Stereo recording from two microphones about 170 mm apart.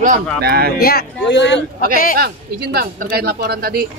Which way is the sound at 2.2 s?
65° right (ahead or behind).